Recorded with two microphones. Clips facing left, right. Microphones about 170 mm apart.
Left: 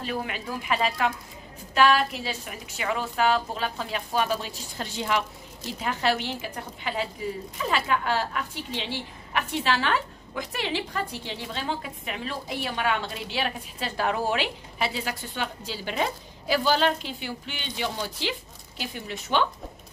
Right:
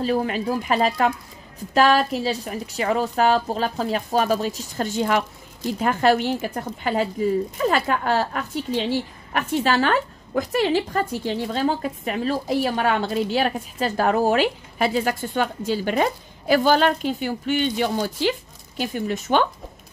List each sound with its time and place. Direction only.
0.0 s a woman's voice: 40° right (ahead or behind)